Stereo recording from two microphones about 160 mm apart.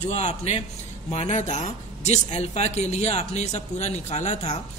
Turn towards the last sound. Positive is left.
turn(degrees=45)  # may be behind; listen again after turning